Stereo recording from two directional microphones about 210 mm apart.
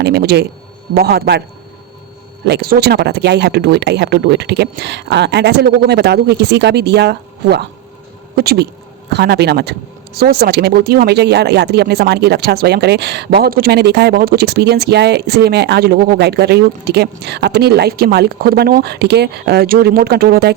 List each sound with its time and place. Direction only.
0.0 s speech: 50° right (ahead or behind)
2.4 s speech: 50° right (ahead or behind)